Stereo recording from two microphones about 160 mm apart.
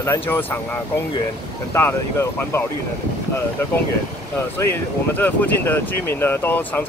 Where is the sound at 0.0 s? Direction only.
15° left (ahead or behind).